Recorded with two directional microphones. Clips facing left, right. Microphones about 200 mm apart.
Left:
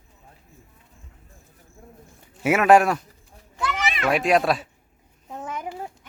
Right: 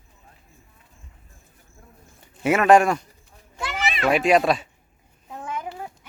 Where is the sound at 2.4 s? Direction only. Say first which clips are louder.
Even; 5° left (ahead or behind).